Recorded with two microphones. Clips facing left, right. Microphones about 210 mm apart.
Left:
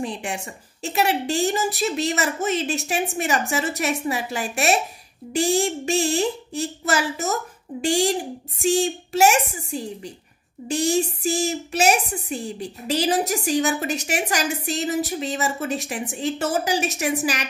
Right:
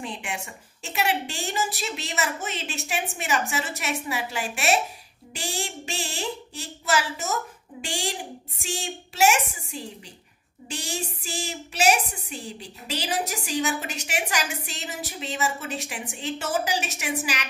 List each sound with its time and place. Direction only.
0.0 s a woman's voice: 35° left (ahead or behind)